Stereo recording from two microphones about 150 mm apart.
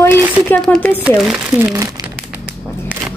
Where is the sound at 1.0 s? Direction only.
5° right (ahead or behind).